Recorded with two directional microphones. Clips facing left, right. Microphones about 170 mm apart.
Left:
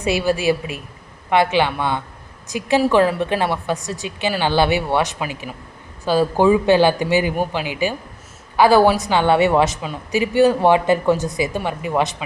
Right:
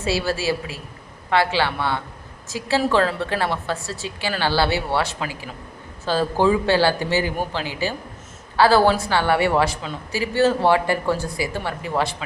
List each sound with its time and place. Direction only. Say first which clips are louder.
0.0 s a woman's voice: left 4 dB; 15° left (ahead or behind)